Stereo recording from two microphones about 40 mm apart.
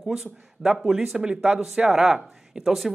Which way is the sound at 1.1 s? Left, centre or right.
Centre.